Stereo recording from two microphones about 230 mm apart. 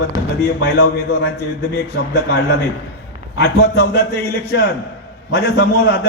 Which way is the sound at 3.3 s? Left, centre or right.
Left.